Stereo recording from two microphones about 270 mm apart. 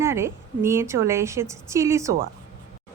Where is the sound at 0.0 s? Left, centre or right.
Centre.